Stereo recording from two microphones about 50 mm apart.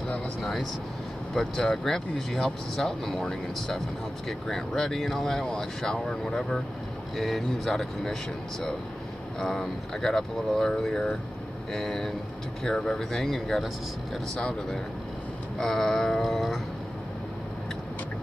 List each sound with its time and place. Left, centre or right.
0.1 s speech: centre